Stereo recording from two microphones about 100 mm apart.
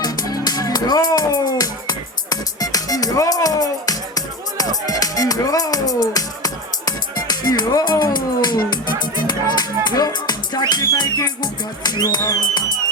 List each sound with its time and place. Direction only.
0.0 s music: 40° left (ahead or behind)
11.8 s a sound: 45° left (ahead or behind)
12.2 s music: 35° left (ahead or behind)